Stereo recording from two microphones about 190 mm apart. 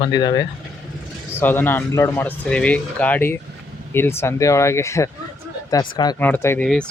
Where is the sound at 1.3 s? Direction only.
10° left (ahead or behind).